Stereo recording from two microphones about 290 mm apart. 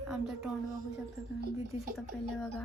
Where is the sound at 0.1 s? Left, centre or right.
Centre.